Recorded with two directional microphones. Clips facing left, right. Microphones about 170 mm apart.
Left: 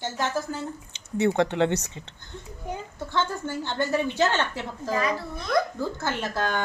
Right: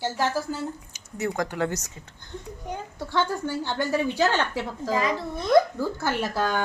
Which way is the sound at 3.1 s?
10° right (ahead or behind).